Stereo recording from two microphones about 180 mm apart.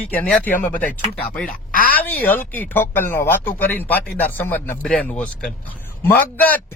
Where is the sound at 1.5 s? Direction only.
50° left (ahead or behind).